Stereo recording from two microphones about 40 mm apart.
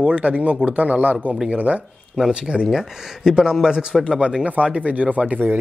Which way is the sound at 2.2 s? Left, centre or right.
Right.